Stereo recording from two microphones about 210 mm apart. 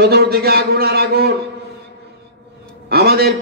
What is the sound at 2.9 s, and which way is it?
Speech, 50° right (ahead or behind).